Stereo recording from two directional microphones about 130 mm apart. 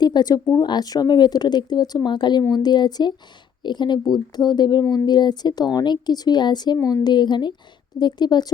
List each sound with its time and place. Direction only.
0.0 s speech: 35° left (ahead or behind)